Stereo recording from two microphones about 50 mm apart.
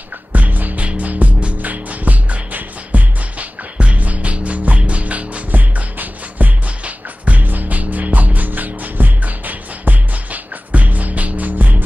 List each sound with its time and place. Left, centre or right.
0.3 s music: right